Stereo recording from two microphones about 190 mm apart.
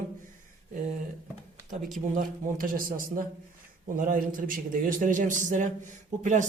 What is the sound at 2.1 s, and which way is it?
A man's voice, 50° right (ahead or behind).